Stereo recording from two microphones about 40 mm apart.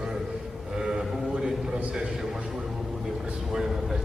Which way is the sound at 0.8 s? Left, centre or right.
Centre.